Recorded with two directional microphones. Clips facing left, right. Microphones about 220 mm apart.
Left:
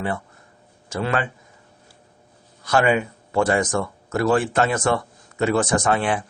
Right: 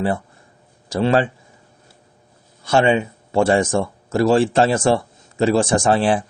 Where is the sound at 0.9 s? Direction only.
30° right (ahead or behind).